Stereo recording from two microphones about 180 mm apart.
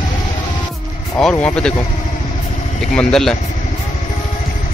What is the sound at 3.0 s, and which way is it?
Speech, 5° left (ahead or behind).